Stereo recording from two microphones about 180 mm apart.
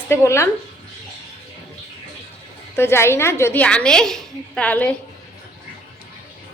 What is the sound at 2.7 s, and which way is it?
A woman's voice, 15° left (ahead or behind).